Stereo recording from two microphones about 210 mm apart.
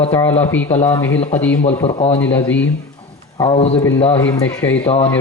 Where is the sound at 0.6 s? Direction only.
20° left (ahead or behind).